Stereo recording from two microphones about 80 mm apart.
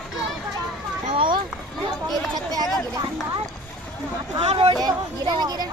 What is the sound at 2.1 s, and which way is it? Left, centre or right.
Speech, right.